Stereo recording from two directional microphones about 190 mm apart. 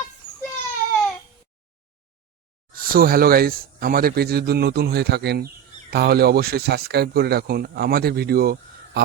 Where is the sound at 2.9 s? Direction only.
50° right (ahead or behind).